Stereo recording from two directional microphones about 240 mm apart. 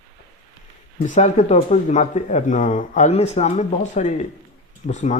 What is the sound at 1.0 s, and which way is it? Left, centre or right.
Speech, left.